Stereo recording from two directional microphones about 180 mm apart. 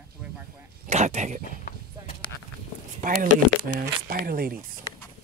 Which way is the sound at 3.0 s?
50° right (ahead or behind).